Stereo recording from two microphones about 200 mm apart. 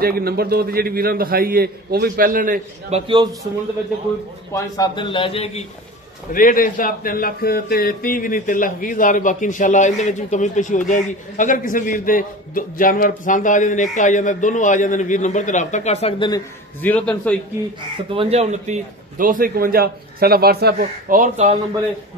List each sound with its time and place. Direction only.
0.0 s a man's voice: 50° right (ahead or behind)
4.6 s a man's voice: 20° left (ahead or behind)
6.3 s a man's voice: 45° left (ahead or behind); by 16.4 s 20° left (ahead or behind)
16.8 s a man's voice: 5° left (ahead or behind)
18.1 s a man's voice: 30° right (ahead or behind)